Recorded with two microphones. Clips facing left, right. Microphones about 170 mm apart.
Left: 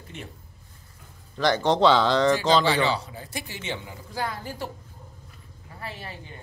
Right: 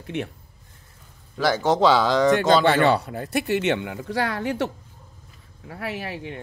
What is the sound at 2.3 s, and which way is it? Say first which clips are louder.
A man's voice: right 4 dB; 55° right (ahead or behind).